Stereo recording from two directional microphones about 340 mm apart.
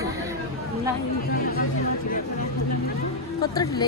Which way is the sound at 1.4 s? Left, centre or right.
Left.